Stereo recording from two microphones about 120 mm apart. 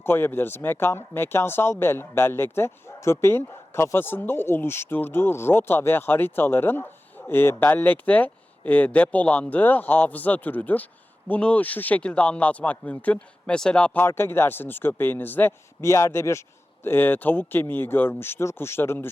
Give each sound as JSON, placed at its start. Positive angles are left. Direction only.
{"t": 0.0, "sound": "speech", "side_deg": 20}